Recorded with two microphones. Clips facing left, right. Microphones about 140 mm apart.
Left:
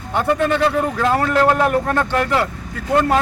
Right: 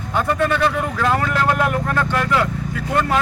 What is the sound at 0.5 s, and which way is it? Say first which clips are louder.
Speech: left 2 dB; 25° left (ahead or behind).